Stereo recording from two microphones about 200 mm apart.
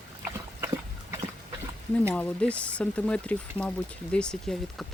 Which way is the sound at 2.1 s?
5° left (ahead or behind).